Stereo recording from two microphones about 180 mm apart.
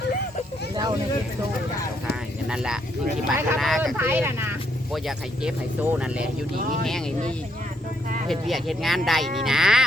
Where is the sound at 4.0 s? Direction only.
10° right (ahead or behind).